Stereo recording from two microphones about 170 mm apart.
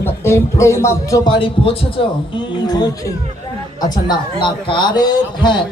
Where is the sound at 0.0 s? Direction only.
15° left (ahead or behind).